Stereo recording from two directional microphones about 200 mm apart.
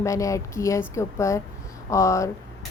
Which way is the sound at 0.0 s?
15° left (ahead or behind).